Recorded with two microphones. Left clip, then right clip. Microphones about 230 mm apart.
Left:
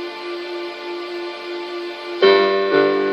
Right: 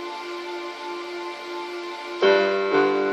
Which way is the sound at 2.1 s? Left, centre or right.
Left.